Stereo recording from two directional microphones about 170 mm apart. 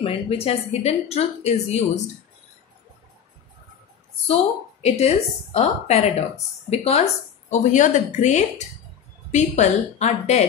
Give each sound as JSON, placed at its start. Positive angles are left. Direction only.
{"t": 0.0, "sound": "a woman's voice", "side_deg": 35}
{"t": 4.8, "sound": "a woman's voice", "side_deg": 40}